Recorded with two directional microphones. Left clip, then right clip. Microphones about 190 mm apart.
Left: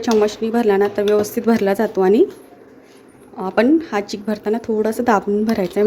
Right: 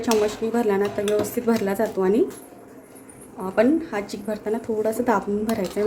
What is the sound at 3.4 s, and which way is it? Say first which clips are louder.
Speech: left 4 dB; 45° left (ahead or behind).